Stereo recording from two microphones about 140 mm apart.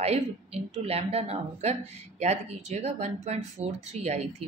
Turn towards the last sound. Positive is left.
turn(degrees=-50)  # may be behind; listen again after turning